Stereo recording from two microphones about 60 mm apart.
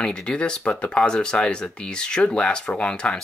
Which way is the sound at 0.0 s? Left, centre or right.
Centre.